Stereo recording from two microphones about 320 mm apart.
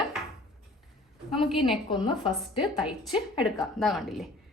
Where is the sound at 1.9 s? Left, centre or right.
Centre.